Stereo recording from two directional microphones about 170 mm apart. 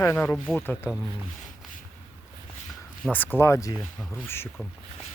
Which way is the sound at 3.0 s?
10° left (ahead or behind).